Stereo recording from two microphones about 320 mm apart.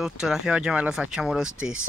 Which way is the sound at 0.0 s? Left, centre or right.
Centre.